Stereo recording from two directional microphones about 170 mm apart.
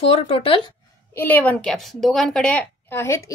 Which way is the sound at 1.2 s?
10° left (ahead or behind).